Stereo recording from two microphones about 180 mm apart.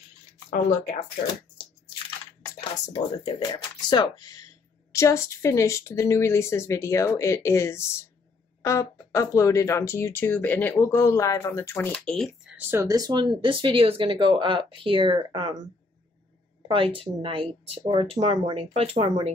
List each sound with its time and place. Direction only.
0.5 s speech: 45° left (ahead or behind)
3.5 s speech: 20° left (ahead or behind); by 12.3 s 5° left (ahead or behind)
12.5 s speech: 10° right (ahead or behind); by 15.5 s 30° right (ahead or behind)
16.6 s speech: 30° right (ahead or behind)